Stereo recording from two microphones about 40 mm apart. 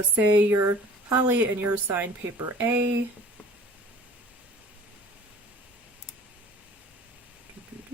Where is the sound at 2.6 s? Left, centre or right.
Right.